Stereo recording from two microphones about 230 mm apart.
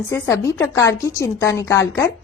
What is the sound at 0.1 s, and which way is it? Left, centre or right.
A woman's voice, centre.